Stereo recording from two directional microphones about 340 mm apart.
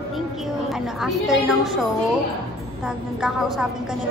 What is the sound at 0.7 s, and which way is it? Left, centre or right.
A woman's voice, centre.